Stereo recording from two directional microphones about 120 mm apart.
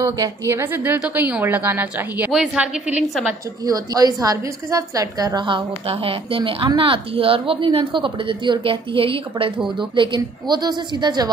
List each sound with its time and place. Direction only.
0.0 s a woman's voice: 25° right (ahead or behind)
3.6 s a woman's voice: 30° right (ahead or behind)